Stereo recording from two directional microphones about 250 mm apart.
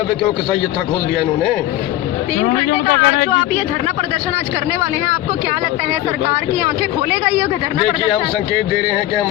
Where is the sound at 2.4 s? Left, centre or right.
Left.